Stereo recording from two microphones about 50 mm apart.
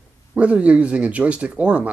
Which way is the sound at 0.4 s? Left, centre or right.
Right.